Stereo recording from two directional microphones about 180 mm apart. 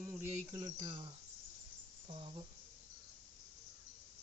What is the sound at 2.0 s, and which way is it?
Speech, 30° right (ahead or behind).